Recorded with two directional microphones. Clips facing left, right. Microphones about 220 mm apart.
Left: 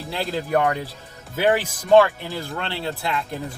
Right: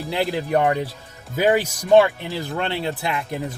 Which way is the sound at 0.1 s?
15° right (ahead or behind).